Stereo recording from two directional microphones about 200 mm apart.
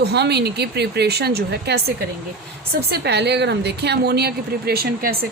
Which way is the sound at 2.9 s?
55° right (ahead or behind).